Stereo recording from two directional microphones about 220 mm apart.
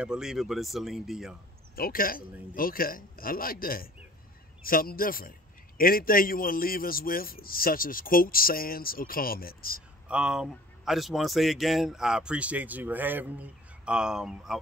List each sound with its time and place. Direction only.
0.0 s speech: 5° right (ahead or behind)
1.8 s a man's voice: 40° left (ahead or behind)
10.0 s speech: 5° right (ahead or behind)